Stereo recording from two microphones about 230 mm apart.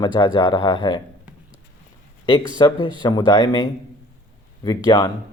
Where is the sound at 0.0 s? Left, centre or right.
Centre.